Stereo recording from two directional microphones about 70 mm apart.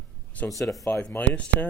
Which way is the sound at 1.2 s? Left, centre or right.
Centre.